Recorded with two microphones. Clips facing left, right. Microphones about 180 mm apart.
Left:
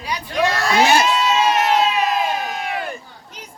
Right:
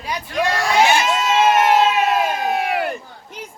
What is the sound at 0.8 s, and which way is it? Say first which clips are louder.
Speech: left 2 dB; 40° left (ahead or behind).